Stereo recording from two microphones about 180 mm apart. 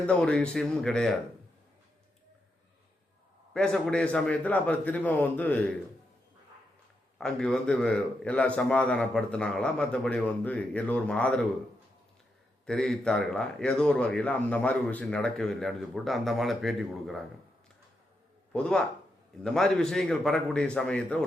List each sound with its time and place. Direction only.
0.0 s a man's voice: 5° left (ahead or behind)
3.5 s a man's voice: 5° left (ahead or behind)
7.2 s a man's voice: 5° left (ahead or behind)
12.6 s a man's voice: 5° left (ahead or behind)
18.5 s a man's voice: 5° left (ahead or behind)